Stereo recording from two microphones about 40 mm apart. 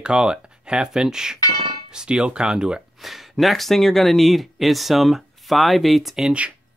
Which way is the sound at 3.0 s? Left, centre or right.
Centre.